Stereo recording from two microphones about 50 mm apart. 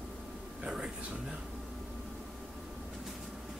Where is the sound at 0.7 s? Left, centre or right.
Centre.